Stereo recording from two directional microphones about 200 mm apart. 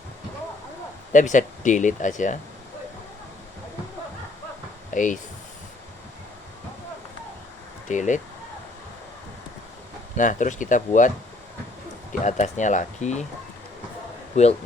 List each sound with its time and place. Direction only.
1.1 s speech: 40° left (ahead or behind)
4.9 s speech: 40° left (ahead or behind)
7.9 s speech: 40° left (ahead or behind)
10.2 s speech: 40° left (ahead or behind)
12.2 s speech: 35° left (ahead or behind)